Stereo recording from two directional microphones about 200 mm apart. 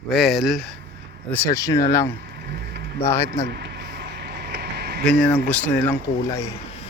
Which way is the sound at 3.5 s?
55° right (ahead or behind).